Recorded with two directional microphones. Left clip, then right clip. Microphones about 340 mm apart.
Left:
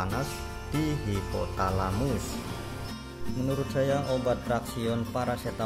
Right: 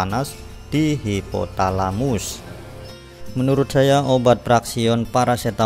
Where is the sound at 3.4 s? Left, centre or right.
Right.